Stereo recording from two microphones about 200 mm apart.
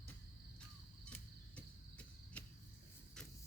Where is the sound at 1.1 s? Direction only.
5° left (ahead or behind).